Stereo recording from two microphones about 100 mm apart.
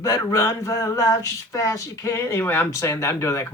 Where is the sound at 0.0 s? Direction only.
35° left (ahead or behind).